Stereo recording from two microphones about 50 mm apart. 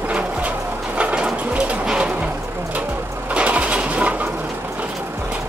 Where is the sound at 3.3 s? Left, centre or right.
Right.